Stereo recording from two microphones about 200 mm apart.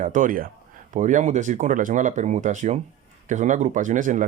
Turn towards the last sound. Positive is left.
turn(degrees=-40)  # may be behind; listen again after turning